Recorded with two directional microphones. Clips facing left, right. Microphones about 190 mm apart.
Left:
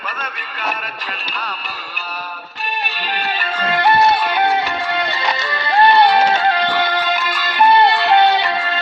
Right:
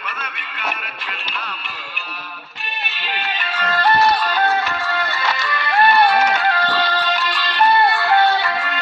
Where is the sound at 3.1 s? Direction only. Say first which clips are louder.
Left 2 dB; 40° left (ahead or behind).